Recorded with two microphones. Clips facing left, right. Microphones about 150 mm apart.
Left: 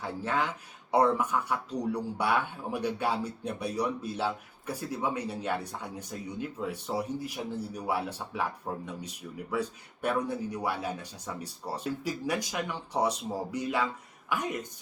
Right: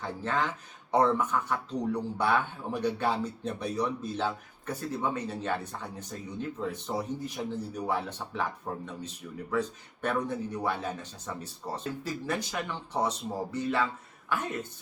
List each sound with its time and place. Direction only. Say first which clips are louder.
0.0 s speech: even; 10° left (ahead or behind)